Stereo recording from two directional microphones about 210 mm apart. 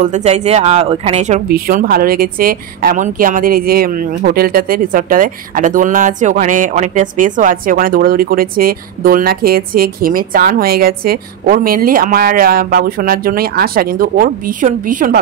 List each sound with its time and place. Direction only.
0.0 s speech: 35° right (ahead or behind)